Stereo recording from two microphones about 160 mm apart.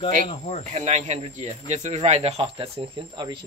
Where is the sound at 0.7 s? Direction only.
45° right (ahead or behind).